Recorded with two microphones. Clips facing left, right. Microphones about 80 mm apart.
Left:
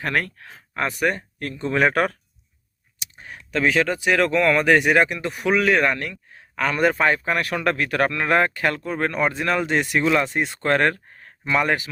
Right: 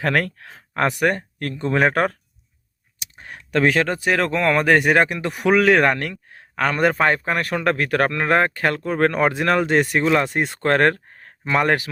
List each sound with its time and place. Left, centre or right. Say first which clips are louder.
0.0 s speech: right 4 dB; right
3.0 s speech: right 1 dB; right
10.0 s speech: left 2 dB; right
10.3 s speech: right 2 dB; right